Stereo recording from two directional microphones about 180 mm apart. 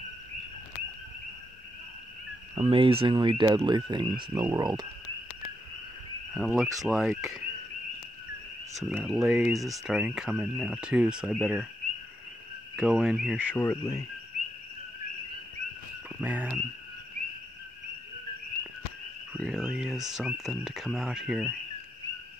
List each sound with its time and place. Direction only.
2.5 s speech: 30° right (ahead or behind)
6.3 s speech: centre (ahead or behind)
8.8 s speech: centre (ahead or behind)
12.7 s speech: 5° right (ahead or behind)
13.6 s speech: 15° left (ahead or behind)
16.1 s speech: 10° right (ahead or behind)
19.3 s speech: 5° right (ahead or behind)